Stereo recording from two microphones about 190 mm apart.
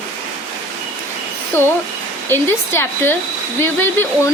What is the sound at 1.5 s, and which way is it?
Speech, 10° left (ahead or behind).